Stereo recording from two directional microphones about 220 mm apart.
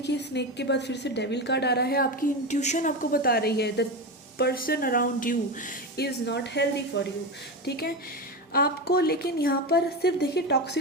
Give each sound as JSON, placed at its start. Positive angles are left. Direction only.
{"t": 0.0, "sound": "a woman's voice", "side_deg": 50}
{"t": 6.2, "sound": "a woman's voice", "side_deg": 50}